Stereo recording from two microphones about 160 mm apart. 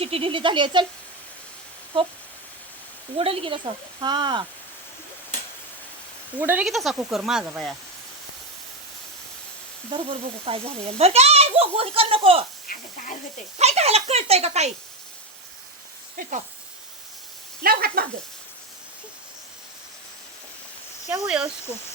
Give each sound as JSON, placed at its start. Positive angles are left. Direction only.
{"t": 0.0, "sound": "speech", "side_deg": -35}
{"t": 3.2, "sound": "speech", "side_deg": -35}
{"t": 6.4, "sound": "speech", "side_deg": -10}
{"t": 6.7, "sound": "speech", "side_deg": 0}
{"t": 9.9, "sound": "speech", "side_deg": -35}
{"t": 12.6, "sound": "speech", "side_deg": 60}
{"t": 13.6, "sound": "speech", "side_deg": -40}
{"t": 16.2, "sound": "speech", "side_deg": -60}
{"t": 17.6, "sound": "speech", "side_deg": -70}
{"t": 21.1, "sound": "speech", "side_deg": -5}